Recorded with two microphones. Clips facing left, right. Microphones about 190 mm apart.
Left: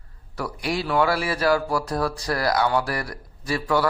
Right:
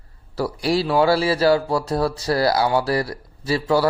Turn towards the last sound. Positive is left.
turn(degrees=-25)  # may be behind; listen again after turning